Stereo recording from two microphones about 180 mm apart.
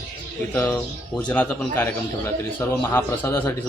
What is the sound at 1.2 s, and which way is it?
Speech, 5° left (ahead or behind).